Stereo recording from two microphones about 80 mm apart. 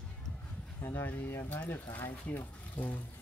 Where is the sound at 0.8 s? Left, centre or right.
Left.